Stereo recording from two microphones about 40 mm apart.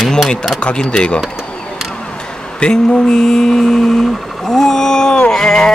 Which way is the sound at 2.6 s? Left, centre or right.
Left.